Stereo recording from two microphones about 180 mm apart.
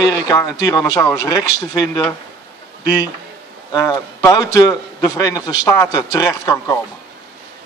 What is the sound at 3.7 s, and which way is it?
A man's voice, 20° left (ahead or behind).